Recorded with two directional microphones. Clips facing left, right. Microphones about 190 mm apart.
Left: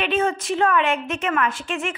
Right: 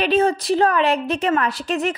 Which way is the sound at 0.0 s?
35° right (ahead or behind).